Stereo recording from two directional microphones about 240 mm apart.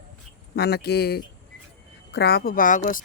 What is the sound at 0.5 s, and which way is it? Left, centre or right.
Speech, left.